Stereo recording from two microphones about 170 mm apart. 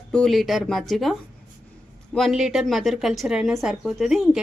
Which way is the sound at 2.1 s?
Centre (ahead or behind).